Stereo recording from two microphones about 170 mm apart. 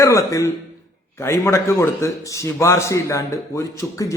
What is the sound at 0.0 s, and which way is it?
A man's voice, 20° left (ahead or behind).